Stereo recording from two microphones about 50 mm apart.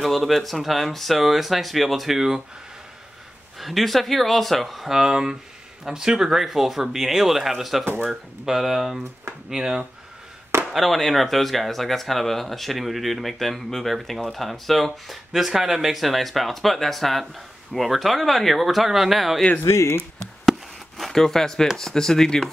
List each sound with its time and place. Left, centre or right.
0.0 s speech: centre
3.5 s speech: centre
19.6 s speech: left
21.0 s speech: centre